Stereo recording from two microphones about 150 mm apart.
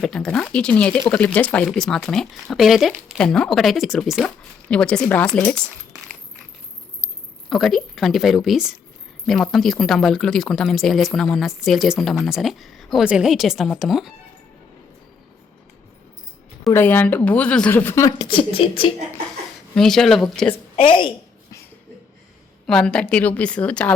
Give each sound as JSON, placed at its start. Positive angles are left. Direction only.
{"t": 0.0, "sound": "speech", "side_deg": 5}
{"t": 7.5, "sound": "speech", "side_deg": 0}
{"t": 16.6, "sound": "speech", "side_deg": 15}
{"t": 18.3, "sound": "speech", "side_deg": 35}
{"t": 19.7, "sound": "speech", "side_deg": 5}
{"t": 20.8, "sound": "speech", "side_deg": 35}
{"t": 22.6, "sound": "speech", "side_deg": 5}